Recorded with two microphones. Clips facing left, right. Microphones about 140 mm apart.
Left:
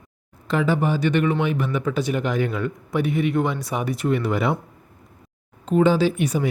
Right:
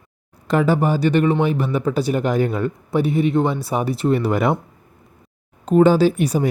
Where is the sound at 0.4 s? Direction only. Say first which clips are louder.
Right 4 dB; 40° right (ahead or behind).